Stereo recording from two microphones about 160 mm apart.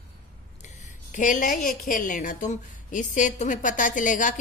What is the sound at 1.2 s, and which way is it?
A woman's voice, 55° left (ahead or behind).